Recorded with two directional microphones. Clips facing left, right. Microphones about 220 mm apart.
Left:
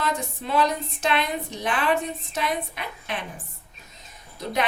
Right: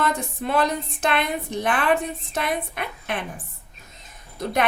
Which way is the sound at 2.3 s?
55° right (ahead or behind).